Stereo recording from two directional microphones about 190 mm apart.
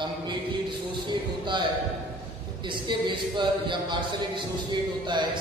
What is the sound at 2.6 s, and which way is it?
A man's voice, 25° right (ahead or behind).